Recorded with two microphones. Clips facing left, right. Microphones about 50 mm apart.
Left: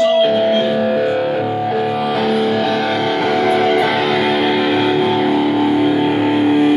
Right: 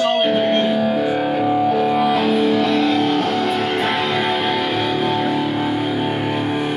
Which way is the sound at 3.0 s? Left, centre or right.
Left.